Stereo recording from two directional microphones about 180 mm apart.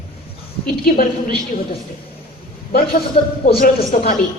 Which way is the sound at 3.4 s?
45° left (ahead or behind).